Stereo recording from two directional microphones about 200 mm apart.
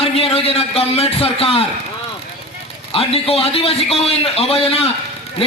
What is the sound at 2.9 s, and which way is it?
A man's voice, 30° left (ahead or behind).